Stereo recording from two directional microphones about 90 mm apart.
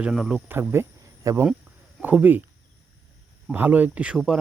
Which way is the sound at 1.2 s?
40° right (ahead or behind).